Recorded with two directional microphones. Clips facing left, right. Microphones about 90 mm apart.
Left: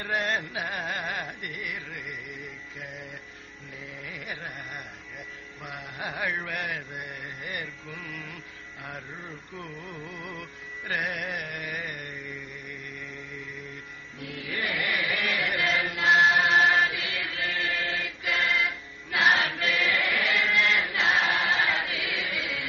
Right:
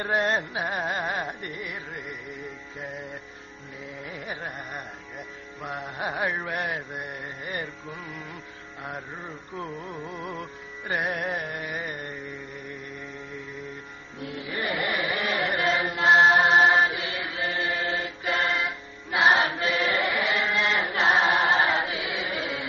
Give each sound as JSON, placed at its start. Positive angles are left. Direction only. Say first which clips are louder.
{"t": 0.0, "sound": "carnatic music", "louder": "right 4 dB", "side_deg": -30}
{"t": 4.0, "sound": "carnatic music", "louder": "right 3 dB", "side_deg": -30}
{"t": 5.6, "sound": "music", "louder": "right 5 dB", "side_deg": -35}
{"t": 9.6, "sound": "carnatic music", "louder": "right 6 dB", "side_deg": -30}
{"t": 10.4, "sound": "music", "louder": "right 3 dB", "side_deg": -30}
{"t": 14.2, "sound": "chant", "louder": "right 2 dB", "side_deg": -25}